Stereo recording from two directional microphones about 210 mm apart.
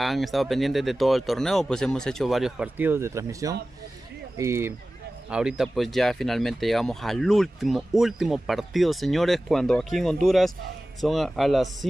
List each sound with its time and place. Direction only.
0.0 s speech: centre (ahead or behind)